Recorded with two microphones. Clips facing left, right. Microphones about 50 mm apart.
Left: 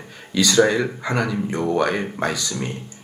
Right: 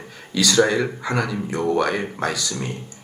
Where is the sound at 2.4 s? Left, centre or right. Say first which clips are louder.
Left 1 dB; centre.